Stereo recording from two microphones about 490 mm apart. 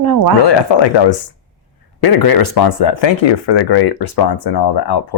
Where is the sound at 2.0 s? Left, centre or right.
Left.